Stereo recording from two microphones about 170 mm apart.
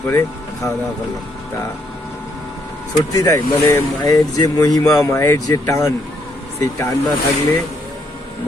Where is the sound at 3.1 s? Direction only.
20° left (ahead or behind).